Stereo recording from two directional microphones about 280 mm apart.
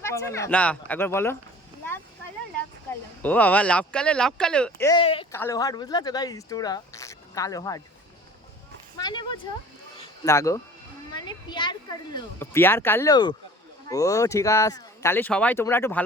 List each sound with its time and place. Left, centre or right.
0.0 s speech: centre
2.9 s speech: centre
9.0 s speech: centre